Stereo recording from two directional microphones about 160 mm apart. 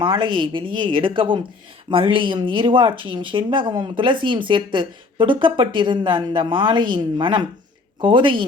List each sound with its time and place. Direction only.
0.0 s speech: 30° right (ahead or behind)